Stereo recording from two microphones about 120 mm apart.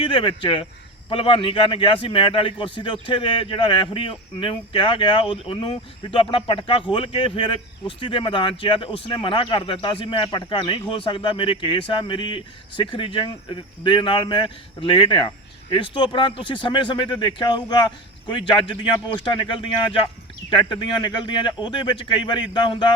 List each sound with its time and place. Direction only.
0.0 s a man's voice: 45° left (ahead or behind)